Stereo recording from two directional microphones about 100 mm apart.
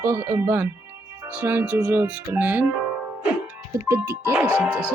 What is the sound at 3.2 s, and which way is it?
Music, 15° right (ahead or behind).